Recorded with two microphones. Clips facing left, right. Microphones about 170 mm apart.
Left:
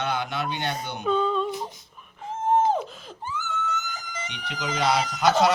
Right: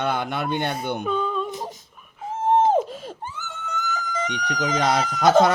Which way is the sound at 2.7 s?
45° right (ahead or behind).